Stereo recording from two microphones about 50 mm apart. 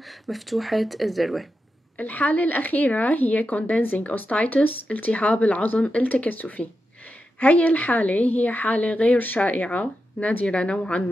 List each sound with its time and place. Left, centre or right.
0.0 s speech: centre
2.0 s a woman's voice: left